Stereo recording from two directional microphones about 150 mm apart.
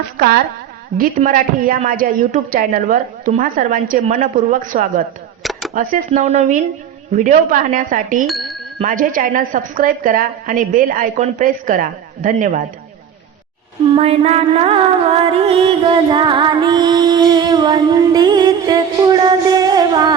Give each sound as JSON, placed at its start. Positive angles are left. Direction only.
{"t": 0.9, "sound": "a woman's voice", "side_deg": -65}
{"t": 5.4, "sound": "a sound", "side_deg": 0}
{"t": 5.7, "sound": "a woman's voice", "side_deg": -70}
{"t": 6.1, "sound": "a woman's voice", "side_deg": -50}
{"t": 8.3, "sound": "a sound", "side_deg": 0}
{"t": 8.9, "sound": "a woman's voice", "side_deg": -70}
{"t": 13.9, "sound": "music", "side_deg": -40}